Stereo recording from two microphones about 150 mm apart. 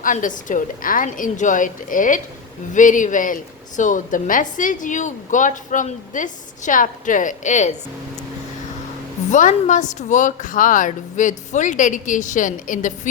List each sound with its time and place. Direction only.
0.0 s a woman's voice: 60° left (ahead or behind)
9.3 s a woman's voice: 55° left (ahead or behind)